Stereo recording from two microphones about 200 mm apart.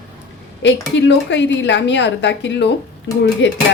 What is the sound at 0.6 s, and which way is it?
A woman's voice, 60° left (ahead or behind).